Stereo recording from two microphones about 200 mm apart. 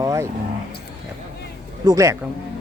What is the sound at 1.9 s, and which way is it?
Speech, 15° right (ahead or behind).